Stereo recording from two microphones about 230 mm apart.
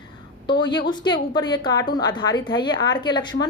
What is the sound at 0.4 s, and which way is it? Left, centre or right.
A woman's voice, centre.